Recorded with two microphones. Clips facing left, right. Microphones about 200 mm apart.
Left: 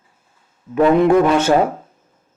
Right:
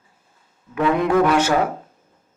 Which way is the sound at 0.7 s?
30° left (ahead or behind).